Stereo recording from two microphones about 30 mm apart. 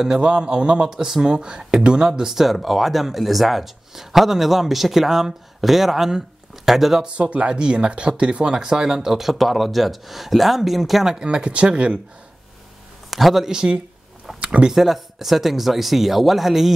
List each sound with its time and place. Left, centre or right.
0.2 s speech: right
0.8 s speech: centre
1.2 s speech: right
2.2 s speech: centre
7.2 s speech: right
7.5 s speech: right
8.5 s speech: right
9.2 s speech: centre
11.1 s speech: right
13.1 s speech: centre
14.7 s speech: centre